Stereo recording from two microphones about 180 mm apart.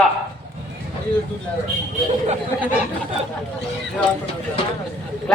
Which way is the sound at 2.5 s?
10° left (ahead or behind).